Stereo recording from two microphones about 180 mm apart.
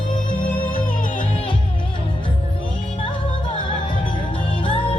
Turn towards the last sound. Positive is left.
turn(degrees=30)  # may be behind; listen again after turning